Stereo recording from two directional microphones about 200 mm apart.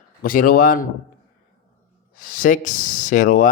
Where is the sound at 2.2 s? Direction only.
40° left (ahead or behind).